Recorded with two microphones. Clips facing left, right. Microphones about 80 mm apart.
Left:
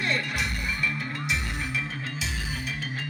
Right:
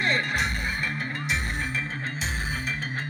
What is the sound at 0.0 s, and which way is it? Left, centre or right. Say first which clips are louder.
Music: right 3 dB; right.